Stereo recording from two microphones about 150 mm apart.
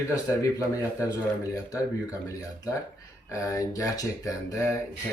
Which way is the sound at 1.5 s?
20° left (ahead or behind).